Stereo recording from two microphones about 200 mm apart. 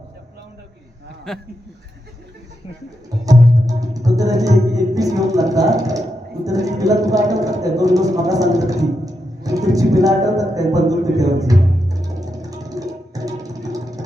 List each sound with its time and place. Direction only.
1.3 s speech: centre (ahead or behind)
3.2 s speech: 15° right (ahead or behind)
12.0 s music: 15° right (ahead or behind)